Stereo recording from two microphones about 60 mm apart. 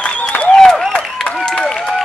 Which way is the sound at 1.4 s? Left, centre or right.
Centre.